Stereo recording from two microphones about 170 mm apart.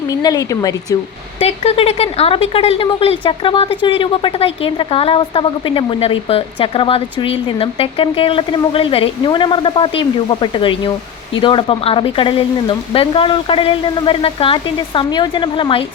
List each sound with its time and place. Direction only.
0.1 s speech: 20° left (ahead or behind)
1.4 s speech: 35° left (ahead or behind)